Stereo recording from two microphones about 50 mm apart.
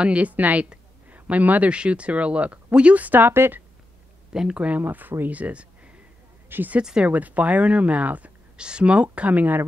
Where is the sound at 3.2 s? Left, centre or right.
Right.